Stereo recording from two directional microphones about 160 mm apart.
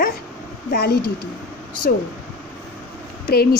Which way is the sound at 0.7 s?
80° left.